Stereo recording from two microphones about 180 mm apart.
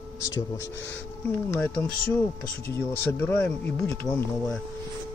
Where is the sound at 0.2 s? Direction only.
15° left (ahead or behind).